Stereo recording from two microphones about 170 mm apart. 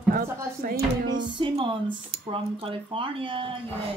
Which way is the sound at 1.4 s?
30° right (ahead or behind).